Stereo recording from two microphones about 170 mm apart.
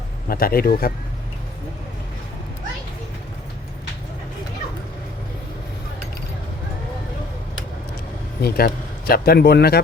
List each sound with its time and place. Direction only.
0.3 s speech: 60° left (ahead or behind)
8.4 s speech: 65° left (ahead or behind)